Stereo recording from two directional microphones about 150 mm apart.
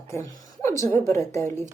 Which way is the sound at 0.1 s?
20° left (ahead or behind).